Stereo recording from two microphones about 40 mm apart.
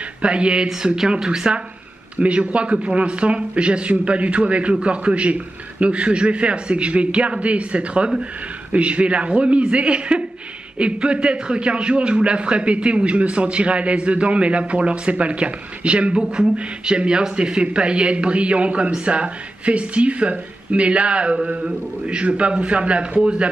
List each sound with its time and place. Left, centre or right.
0.2 s a man's voice: right
2.1 s a man's voice: right